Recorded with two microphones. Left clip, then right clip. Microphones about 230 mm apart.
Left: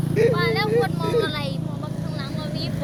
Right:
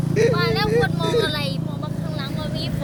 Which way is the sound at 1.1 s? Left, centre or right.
Right.